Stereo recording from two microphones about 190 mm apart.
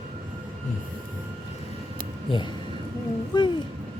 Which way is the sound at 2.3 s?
25° left (ahead or behind).